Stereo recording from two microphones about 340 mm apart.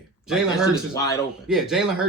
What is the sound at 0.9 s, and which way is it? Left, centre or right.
Speech, centre.